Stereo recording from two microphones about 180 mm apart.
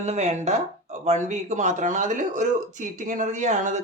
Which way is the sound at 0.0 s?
40° right (ahead or behind).